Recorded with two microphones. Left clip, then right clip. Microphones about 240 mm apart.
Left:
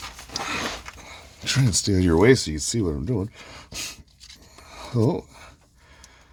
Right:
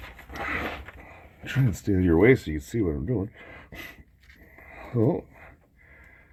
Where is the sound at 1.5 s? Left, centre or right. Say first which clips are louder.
Left 5 dB; left.